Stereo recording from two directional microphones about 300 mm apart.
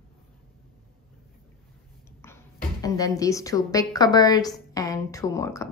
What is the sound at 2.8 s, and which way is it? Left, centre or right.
A woman's voice, centre.